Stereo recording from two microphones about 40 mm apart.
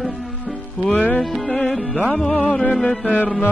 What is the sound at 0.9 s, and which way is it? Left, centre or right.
Music, left.